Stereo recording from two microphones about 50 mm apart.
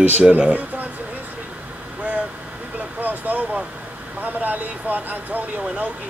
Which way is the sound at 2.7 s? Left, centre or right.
Right.